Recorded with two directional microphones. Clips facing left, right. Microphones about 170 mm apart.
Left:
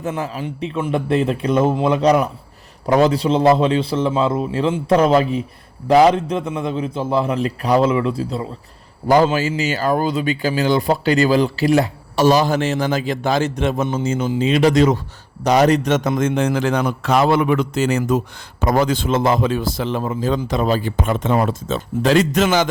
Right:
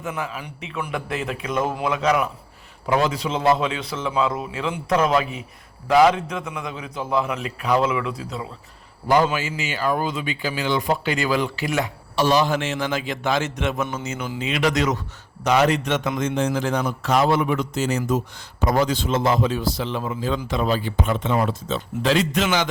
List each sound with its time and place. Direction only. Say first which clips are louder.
0.1 s a man's voice: left 4 dB; 35° left (ahead or behind)